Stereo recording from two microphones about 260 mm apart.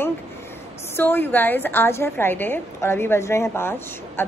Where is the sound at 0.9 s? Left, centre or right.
Centre.